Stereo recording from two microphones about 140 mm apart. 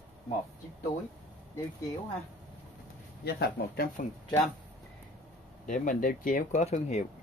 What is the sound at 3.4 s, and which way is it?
Speech, 90° left.